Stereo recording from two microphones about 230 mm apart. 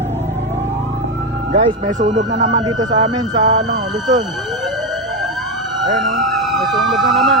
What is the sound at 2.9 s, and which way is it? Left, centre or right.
Speech, centre.